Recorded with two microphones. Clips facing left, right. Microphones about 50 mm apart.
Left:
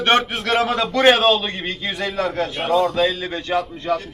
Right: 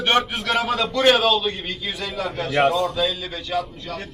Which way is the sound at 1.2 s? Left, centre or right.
Centre.